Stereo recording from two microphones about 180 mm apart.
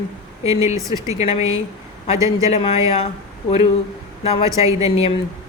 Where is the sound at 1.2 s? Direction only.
35° left (ahead or behind).